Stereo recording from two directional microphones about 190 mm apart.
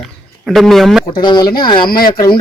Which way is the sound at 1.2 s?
20° left (ahead or behind).